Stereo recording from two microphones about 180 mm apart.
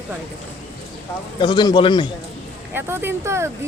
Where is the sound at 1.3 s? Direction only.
25° left (ahead or behind).